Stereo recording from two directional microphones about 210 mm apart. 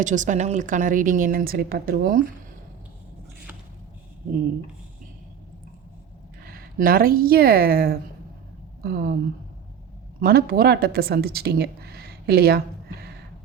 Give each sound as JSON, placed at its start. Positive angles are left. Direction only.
{"t": 0.0, "sound": "a woman's voice", "side_deg": -35}
{"t": 6.4, "sound": "a woman's voice", "side_deg": -45}
{"t": 10.2, "sound": "speech", "side_deg": -45}